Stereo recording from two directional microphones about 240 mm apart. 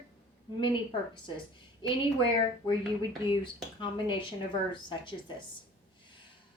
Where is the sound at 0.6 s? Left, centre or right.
Centre.